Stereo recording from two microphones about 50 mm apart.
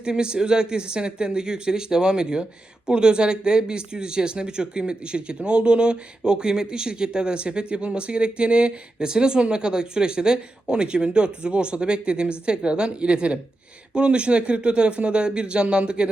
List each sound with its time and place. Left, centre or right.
0.0 s speech: centre